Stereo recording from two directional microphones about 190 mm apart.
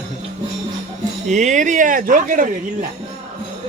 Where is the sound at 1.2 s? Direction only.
40° right (ahead or behind).